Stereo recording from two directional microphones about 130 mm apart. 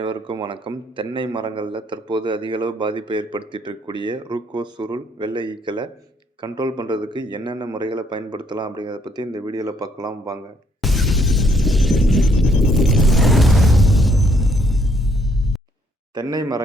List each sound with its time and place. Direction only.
0.0 s a man's voice: 40° right (ahead or behind)
10.8 s shatter: centre (ahead or behind)
16.1 s a man's voice: 30° right (ahead or behind)